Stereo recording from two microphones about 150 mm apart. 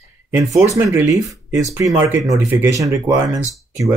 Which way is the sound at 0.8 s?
20° right (ahead or behind).